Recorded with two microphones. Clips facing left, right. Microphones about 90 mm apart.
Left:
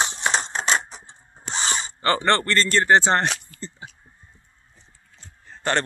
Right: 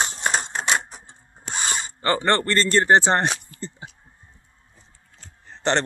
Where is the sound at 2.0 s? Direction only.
15° right (ahead or behind).